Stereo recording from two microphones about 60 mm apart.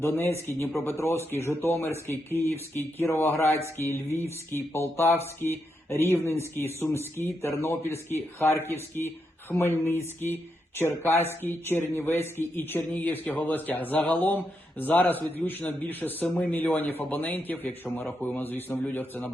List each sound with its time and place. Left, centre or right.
0.0 s speech: left